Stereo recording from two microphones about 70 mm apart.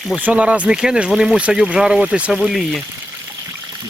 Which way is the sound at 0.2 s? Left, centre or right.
Centre.